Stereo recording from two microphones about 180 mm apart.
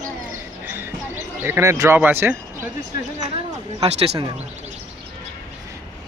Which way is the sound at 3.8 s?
35° right (ahead or behind).